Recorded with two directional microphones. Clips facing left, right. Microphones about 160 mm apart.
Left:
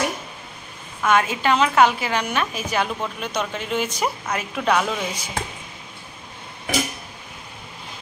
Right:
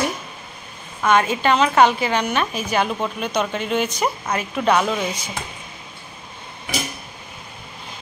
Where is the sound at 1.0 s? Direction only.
5° left (ahead or behind).